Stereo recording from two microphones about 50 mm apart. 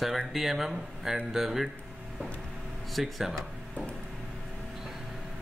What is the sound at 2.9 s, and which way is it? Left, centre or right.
Speech, centre.